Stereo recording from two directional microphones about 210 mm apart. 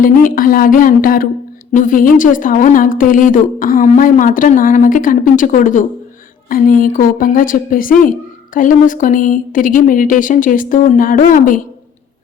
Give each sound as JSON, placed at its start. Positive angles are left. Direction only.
{"t": 0.0, "sound": "a woman's voice", "side_deg": 40}